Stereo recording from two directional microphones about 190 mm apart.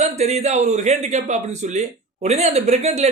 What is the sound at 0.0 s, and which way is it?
Speech, 35° right (ahead or behind).